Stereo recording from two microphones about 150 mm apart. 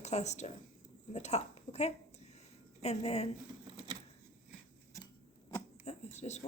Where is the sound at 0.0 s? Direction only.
50° left (ahead or behind).